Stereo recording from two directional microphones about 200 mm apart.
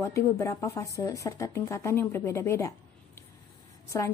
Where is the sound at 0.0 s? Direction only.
15° left (ahead or behind).